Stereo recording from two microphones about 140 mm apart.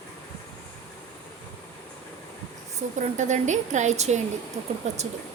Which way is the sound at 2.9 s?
60° right (ahead or behind).